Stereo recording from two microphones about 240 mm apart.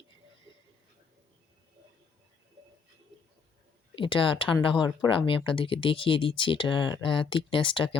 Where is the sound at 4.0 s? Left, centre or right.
Left.